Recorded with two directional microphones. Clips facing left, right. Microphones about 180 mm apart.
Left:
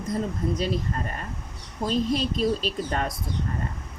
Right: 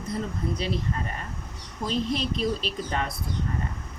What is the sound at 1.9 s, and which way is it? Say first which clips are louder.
Speech: left 3 dB; 40° left (ahead or behind).